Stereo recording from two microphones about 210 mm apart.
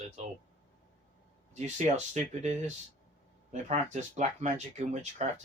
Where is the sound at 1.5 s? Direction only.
35° right (ahead or behind).